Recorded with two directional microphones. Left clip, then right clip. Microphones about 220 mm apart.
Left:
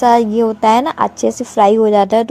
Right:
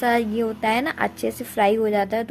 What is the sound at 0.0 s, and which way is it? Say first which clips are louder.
A woman's voice: left 10 dB; 25° left (ahead or behind).